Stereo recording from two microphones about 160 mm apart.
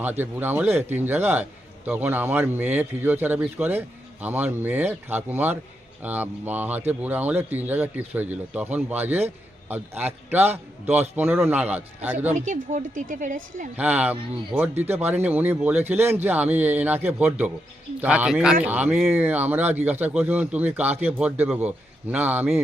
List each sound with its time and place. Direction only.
0.0 s a man's voice: 10° right (ahead or behind)
12.3 s a woman's voice: 55° right (ahead or behind)
13.7 s a man's voice: 10° right (ahead or behind)